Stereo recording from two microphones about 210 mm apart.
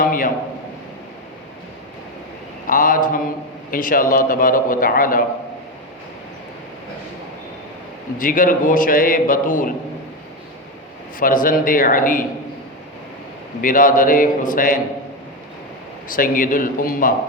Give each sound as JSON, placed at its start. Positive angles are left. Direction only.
{"t": 0.0, "sound": "a man's voice", "side_deg": 40}
{"t": 2.6, "sound": "a man's voice", "side_deg": 40}
{"t": 8.2, "sound": "a man's voice", "side_deg": 40}
{"t": 11.2, "sound": "a man's voice", "side_deg": 40}
{"t": 13.6, "sound": "a man's voice", "side_deg": 40}
{"t": 16.0, "sound": "a man's voice", "side_deg": 40}